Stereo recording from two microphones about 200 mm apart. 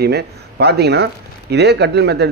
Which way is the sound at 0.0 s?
55° right (ahead or behind).